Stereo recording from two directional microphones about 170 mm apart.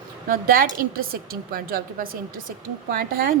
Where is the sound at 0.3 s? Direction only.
55° right (ahead or behind).